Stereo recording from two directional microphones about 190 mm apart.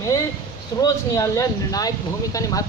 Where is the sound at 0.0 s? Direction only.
15° left (ahead or behind).